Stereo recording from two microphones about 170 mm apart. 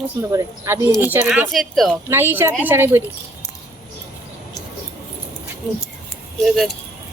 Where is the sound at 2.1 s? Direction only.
15° right (ahead or behind).